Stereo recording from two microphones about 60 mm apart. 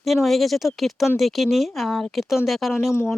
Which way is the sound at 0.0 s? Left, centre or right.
Centre.